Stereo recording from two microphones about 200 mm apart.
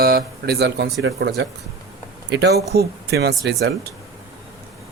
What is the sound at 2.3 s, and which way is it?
Speech, 55° right (ahead or behind).